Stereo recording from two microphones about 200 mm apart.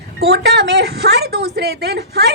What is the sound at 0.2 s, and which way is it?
A woman's voice, 55° right (ahead or behind).